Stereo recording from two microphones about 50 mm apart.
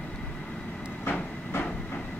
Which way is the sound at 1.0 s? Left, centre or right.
Left.